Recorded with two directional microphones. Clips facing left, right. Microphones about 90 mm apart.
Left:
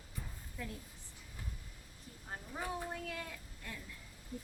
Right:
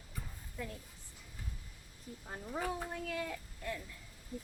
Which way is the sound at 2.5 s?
90° right.